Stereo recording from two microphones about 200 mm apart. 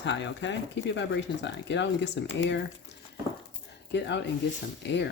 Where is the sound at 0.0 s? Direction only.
65° left (ahead or behind).